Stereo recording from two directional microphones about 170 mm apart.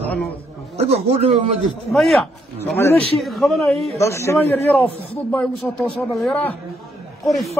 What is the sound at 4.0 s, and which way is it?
Speech, 15° left (ahead or behind).